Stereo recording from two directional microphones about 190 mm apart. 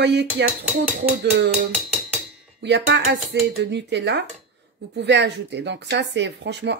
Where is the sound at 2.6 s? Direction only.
65° right (ahead or behind).